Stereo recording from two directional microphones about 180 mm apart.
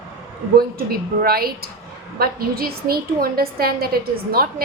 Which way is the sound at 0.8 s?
55° right (ahead or behind).